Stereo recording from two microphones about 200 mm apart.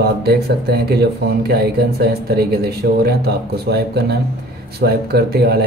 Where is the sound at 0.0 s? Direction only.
55° right (ahead or behind).